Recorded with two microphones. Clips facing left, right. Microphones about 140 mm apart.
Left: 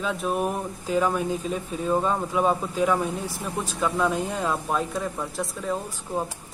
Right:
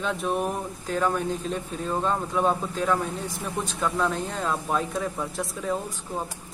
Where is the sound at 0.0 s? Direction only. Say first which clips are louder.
Left 1 dB; centre (ahead or behind).